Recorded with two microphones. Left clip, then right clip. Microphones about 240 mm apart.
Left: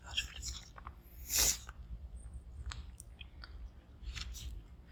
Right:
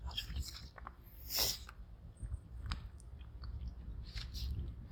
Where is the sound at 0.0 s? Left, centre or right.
Centre.